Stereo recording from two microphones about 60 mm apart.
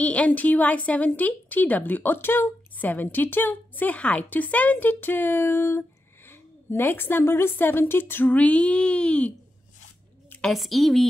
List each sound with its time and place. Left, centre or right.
0.0 s a woman's voice: left
10.5 s a woman's voice: centre